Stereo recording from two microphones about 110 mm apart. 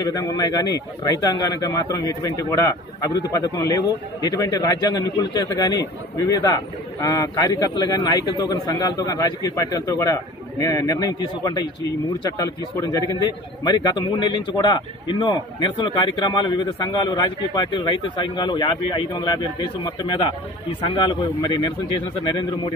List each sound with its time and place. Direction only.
0.0 s a man's voice: 35° left (ahead or behind)